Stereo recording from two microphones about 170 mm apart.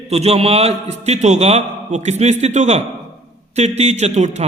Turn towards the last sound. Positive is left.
turn(degrees=-40)  # may be behind; listen again after turning